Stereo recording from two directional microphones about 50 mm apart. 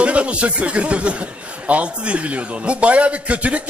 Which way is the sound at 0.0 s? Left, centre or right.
Right.